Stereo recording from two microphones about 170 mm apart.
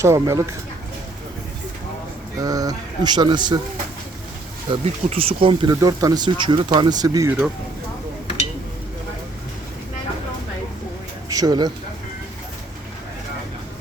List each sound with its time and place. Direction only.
0.0 s speech: 15° right (ahead or behind)
2.4 s speech: 20° right (ahead or behind)
4.7 s speech: 35° right (ahead or behind)
5.8 s speech: 20° right (ahead or behind)
7.3 s speech: 5° right (ahead or behind)
11.3 s speech: 20° right (ahead or behind)